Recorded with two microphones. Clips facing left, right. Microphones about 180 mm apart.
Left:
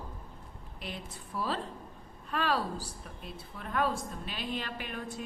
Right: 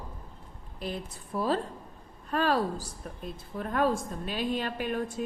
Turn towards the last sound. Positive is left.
turn(degrees=-45)  # may be behind; listen again after turning